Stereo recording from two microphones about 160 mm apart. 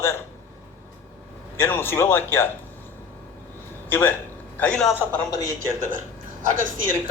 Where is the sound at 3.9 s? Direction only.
10° left (ahead or behind).